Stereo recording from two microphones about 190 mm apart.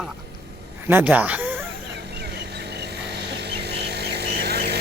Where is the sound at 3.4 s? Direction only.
60° right (ahead or behind).